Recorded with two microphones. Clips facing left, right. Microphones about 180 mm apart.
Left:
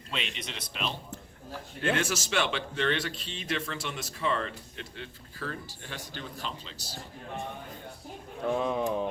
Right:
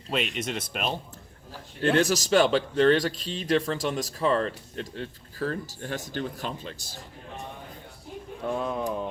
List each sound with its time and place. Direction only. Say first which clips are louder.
0.1 s speech: right 9 dB; 45° right (ahead or behind)
2.0 s speech: right 8 dB; 40° right (ahead or behind)
8.4 s speech: left 1 dB; centre (ahead or behind)